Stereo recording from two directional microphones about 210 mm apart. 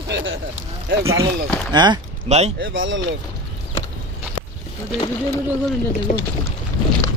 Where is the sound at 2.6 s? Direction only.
65° right (ahead or behind).